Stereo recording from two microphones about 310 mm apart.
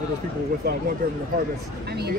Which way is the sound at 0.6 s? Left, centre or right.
Right.